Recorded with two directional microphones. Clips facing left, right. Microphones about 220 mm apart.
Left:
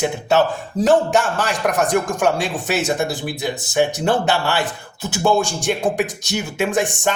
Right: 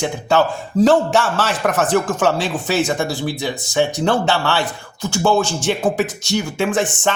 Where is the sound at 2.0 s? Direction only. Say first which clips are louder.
Right 1 dB; 15° left (ahead or behind).